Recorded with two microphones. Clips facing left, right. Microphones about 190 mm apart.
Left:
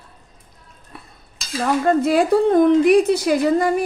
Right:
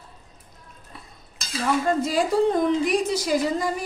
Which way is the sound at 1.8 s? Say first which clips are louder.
Left 6 dB; 60° left (ahead or behind).